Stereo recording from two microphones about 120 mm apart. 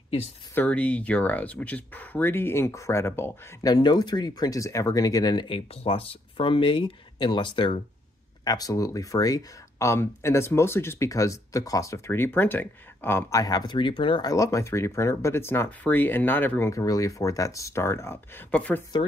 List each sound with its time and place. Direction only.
0.6 s speech: 10° left (ahead or behind)
3.6 s speech: 35° left (ahead or behind)
8.5 s speech: 30° left (ahead or behind)
14.3 s speech: 25° left (ahead or behind)